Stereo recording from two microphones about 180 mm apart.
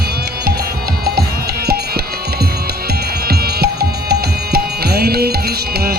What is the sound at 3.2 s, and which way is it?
Music, 60° right (ahead or behind).